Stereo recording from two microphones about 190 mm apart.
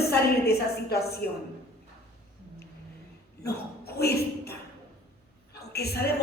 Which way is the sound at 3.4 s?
55° left (ahead or behind).